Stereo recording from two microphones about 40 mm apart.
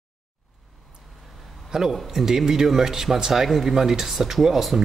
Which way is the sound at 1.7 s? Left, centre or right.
Centre.